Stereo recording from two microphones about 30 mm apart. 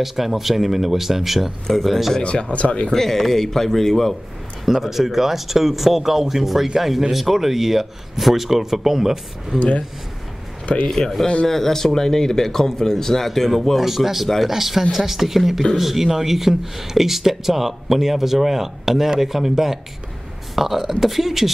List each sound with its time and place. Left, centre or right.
0.0 s speech: centre
2.2 s speech: left
2.9 s speech: centre
4.6 s speech: centre
9.6 s speech: left
10.9 s speech: centre